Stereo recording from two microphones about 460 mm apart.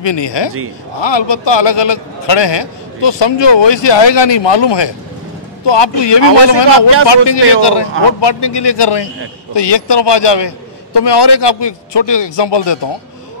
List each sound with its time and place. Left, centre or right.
0.0 s a man's voice: left